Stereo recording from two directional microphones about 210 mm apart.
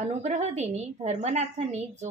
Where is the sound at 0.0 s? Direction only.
35° right (ahead or behind).